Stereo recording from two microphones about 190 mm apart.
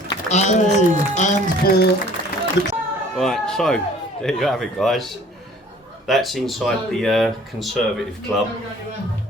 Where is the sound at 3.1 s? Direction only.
Centre (ahead or behind).